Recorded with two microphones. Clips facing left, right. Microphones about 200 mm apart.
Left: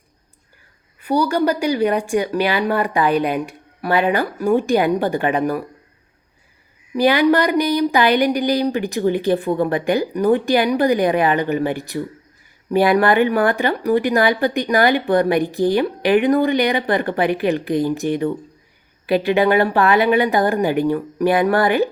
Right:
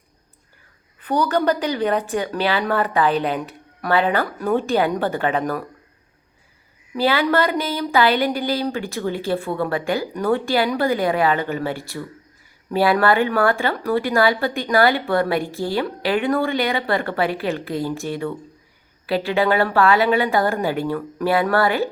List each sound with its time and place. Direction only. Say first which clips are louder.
1.0 s speech: left 2 dB; 10° left (ahead or behind)
6.9 s speech: left 4 dB; 15° left (ahead or behind)